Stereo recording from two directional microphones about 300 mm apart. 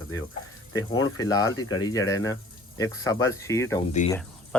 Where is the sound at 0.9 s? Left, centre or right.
Left.